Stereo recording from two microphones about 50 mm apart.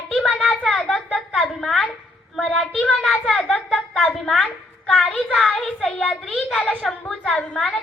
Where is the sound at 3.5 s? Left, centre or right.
Centre.